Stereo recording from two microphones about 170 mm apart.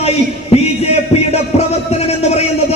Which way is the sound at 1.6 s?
40° left (ahead or behind).